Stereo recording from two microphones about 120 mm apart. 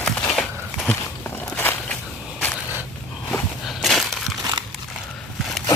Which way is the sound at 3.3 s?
Centre (ahead or behind).